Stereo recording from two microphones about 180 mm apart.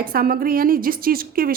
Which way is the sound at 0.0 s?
55° right (ahead or behind).